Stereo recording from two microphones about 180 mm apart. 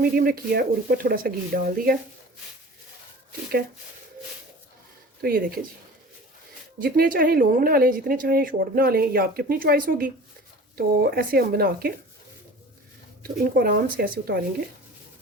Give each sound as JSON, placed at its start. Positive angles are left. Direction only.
{"t": 0.0, "sound": "speech", "side_deg": -55}
{"t": 5.2, "sound": "speech", "side_deg": -55}
{"t": 6.7, "sound": "speech", "side_deg": -55}
{"t": 13.2, "sound": "speech", "side_deg": -55}